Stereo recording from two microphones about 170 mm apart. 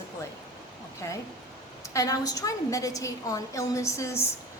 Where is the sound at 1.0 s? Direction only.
20° left (ahead or behind).